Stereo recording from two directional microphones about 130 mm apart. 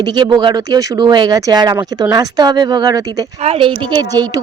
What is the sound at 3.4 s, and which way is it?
Speech, 45° right (ahead or behind).